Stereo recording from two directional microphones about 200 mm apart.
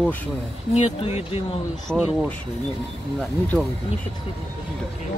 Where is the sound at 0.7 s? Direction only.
30° left (ahead or behind).